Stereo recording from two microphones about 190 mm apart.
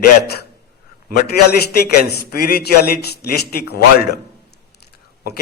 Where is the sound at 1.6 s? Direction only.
55° left (ahead or behind).